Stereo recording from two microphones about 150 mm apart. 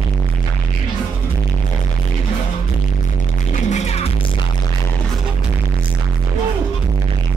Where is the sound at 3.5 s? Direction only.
50° left (ahead or behind).